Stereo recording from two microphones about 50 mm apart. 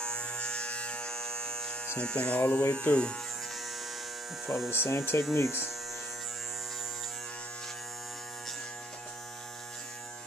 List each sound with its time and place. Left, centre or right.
0.0 s electric shaver: centre
2.0 s speech: left
4.6 s speech: left